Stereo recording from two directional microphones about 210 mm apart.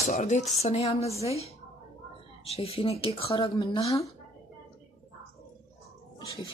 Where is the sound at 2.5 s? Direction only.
30° left (ahead or behind).